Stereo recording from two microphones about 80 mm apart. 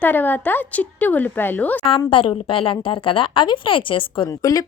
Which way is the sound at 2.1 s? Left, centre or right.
Left.